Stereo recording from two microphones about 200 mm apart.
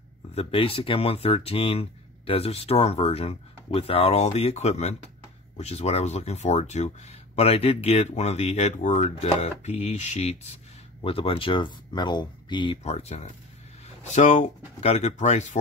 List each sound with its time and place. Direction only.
0.3 s speech: 30° left (ahead or behind)